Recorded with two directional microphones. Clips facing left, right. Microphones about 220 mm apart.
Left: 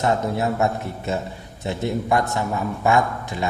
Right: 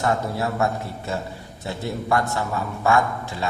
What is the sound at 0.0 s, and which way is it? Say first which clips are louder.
A man's voice: left 2 dB; 20° left (ahead or behind).